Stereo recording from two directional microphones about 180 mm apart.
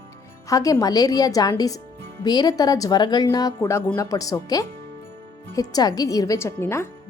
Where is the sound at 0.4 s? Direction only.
20° left (ahead or behind).